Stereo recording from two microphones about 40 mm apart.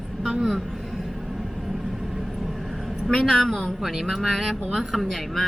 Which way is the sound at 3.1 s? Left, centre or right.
Left.